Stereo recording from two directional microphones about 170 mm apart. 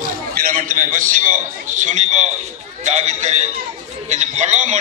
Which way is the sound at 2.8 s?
40° right (ahead or behind).